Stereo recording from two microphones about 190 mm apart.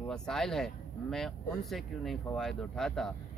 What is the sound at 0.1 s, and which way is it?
Speech, 5° left (ahead or behind).